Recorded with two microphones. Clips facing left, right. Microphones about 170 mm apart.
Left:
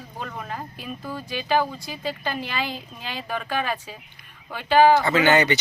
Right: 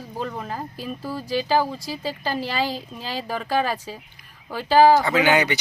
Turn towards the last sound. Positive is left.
turn(degrees=-10)  # may be behind; listen again after turning